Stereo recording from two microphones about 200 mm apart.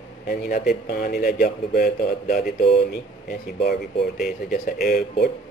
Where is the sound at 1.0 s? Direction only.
45° left (ahead or behind).